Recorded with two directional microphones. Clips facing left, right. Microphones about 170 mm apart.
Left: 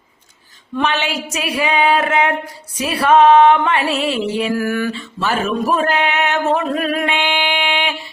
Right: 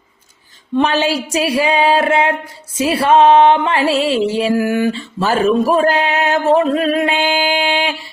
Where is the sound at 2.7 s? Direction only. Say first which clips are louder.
Right 1 dB; 25° right (ahead or behind).